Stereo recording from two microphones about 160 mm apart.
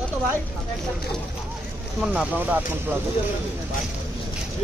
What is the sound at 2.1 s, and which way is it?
Speech, 10° right (ahead or behind).